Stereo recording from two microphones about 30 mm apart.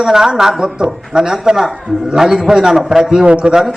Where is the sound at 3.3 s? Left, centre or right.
Right.